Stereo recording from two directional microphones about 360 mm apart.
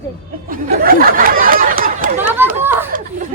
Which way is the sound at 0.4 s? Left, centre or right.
Right.